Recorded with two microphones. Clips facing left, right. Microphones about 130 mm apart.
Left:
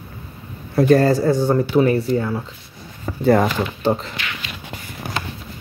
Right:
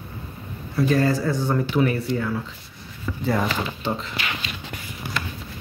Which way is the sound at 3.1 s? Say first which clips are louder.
Left 8 dB; 50° left (ahead or behind).